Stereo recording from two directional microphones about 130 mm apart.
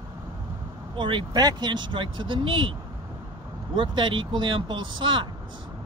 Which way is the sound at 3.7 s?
40° right (ahead or behind).